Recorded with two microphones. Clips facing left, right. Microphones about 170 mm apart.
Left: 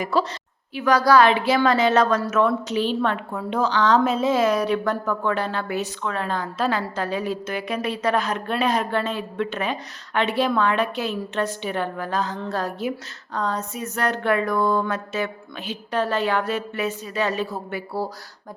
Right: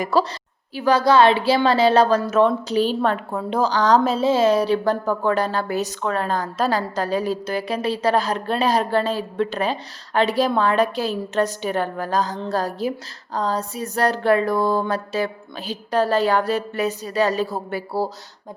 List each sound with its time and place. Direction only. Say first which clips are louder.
0.0 s speech: right 3 dB; 40° right (ahead or behind)